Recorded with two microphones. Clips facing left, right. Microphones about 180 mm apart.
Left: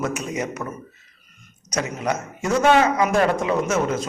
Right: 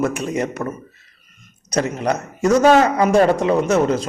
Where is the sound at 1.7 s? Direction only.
35° right (ahead or behind).